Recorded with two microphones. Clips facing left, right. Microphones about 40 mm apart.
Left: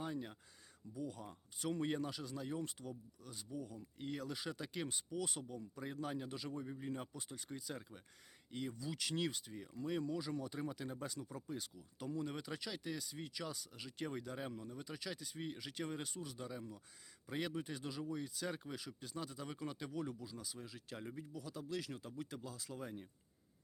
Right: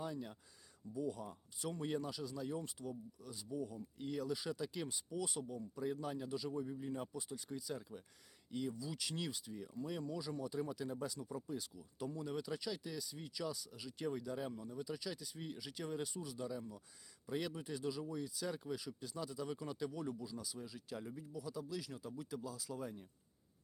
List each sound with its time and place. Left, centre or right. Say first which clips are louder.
0.0 s speech: even; left
0.9 s speech: right 4 dB; left
1.2 s speech: even; left
10.0 s speech: left 2 dB; left
10.3 s speech: right 2 dB; left
16.4 s speech: right 3 dB; left
21.5 s speech: left 4 dB; left